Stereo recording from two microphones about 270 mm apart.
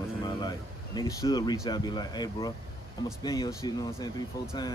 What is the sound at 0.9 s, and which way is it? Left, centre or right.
Speech, centre.